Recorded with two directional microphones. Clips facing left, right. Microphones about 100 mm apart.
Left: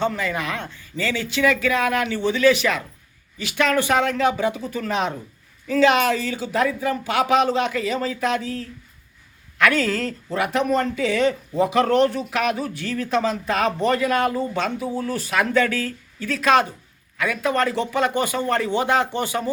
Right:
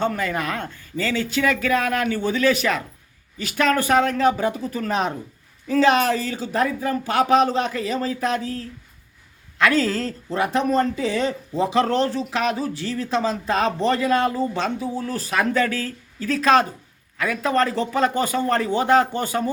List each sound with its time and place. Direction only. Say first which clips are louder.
0.0 s speech: right 1 dB; 45° right (ahead or behind)